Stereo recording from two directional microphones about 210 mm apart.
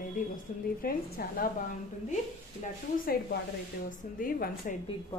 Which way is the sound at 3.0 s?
45° left (ahead or behind).